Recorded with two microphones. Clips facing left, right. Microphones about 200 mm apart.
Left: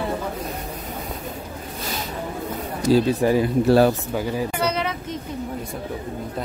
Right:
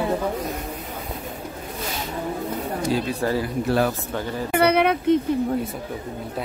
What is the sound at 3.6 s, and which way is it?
Speech, 30° left (ahead or behind).